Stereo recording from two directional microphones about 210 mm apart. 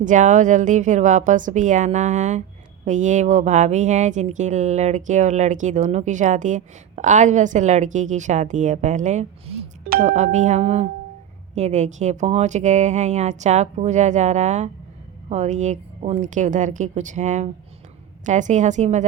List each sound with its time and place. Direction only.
0.0 s speech: 35° right (ahead or behind)